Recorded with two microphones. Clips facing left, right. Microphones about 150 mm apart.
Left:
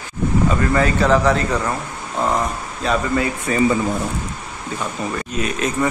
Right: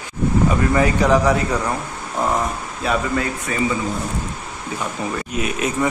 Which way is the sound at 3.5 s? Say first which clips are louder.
Left 6 dB; 30° left (ahead or behind).